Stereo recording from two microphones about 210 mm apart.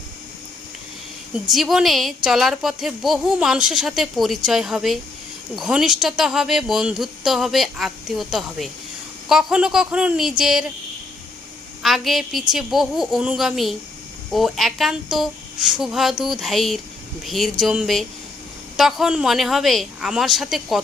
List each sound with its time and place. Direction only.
1.5 s speech: centre (ahead or behind)
11.8 s speech: centre (ahead or behind)